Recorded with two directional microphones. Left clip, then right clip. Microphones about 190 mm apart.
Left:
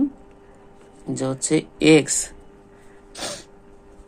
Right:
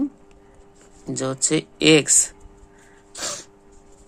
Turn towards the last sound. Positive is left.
turn(degrees=-20)  # may be behind; listen again after turning